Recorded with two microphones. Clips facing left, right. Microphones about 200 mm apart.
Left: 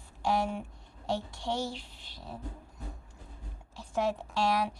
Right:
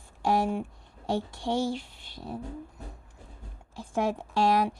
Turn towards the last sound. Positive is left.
turn(degrees=-50)  # may be behind; listen again after turning